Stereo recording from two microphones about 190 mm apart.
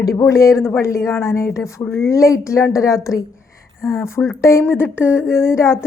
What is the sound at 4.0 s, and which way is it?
Speech, 15° left (ahead or behind).